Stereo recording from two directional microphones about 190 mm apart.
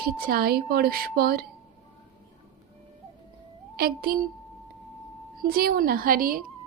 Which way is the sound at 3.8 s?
50° right (ahead or behind).